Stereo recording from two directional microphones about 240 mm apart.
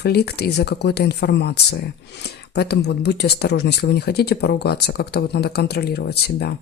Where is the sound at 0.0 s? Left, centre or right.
Left.